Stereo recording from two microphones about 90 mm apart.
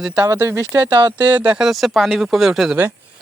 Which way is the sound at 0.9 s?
55° right (ahead or behind).